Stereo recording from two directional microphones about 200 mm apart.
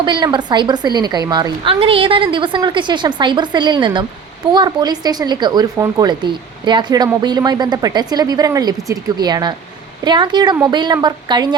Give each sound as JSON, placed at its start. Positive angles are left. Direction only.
{"t": 0.0, "sound": "speech", "side_deg": -20}